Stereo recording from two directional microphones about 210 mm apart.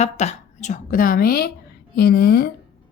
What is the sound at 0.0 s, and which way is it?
A woman's voice, 35° left (ahead or behind).